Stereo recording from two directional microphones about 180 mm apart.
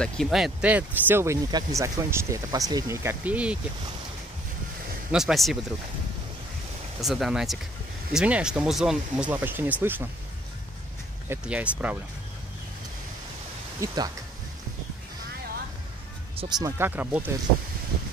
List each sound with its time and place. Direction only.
0.0 s speech: centre (ahead or behind)
5.1 s speech: centre (ahead or behind)
7.0 s speech: centre (ahead or behind)
11.2 s speech: 5° right (ahead or behind)
13.7 s speech: 20° right (ahead or behind)
16.3 s speech: 20° right (ahead or behind)